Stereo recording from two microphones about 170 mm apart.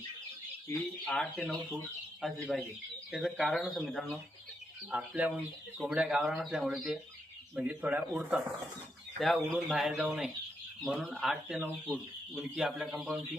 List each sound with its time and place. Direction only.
0.7 s speech: 10° left (ahead or behind); by 8.4 s 10° right (ahead or behind)
9.1 s speech: centre (ahead or behind)